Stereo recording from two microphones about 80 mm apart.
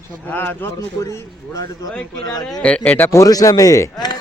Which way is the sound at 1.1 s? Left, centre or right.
Left.